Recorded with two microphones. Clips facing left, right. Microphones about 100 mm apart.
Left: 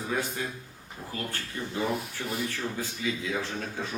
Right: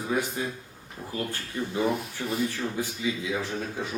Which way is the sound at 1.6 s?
15° right (ahead or behind).